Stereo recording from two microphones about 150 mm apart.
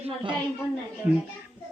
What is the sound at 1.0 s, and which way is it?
Speech, 10° right (ahead or behind).